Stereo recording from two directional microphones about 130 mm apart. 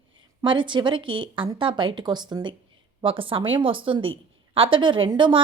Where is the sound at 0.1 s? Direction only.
40° right (ahead or behind).